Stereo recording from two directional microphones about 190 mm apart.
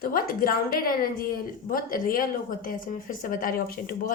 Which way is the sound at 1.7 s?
50° left (ahead or behind).